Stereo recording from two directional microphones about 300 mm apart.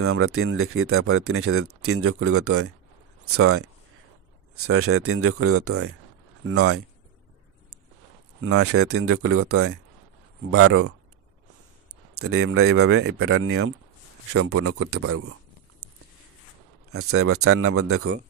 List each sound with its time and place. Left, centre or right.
0.0 s speech: right
8.4 s speech: right
12.1 s speech: right
16.9 s speech: right